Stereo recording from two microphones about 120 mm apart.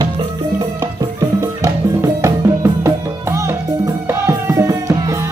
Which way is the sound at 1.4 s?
25° right (ahead or behind).